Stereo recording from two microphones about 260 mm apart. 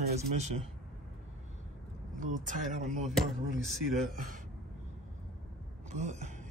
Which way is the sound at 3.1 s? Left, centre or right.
Centre.